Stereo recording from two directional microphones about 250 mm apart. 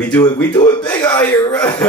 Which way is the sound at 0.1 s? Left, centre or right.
Centre.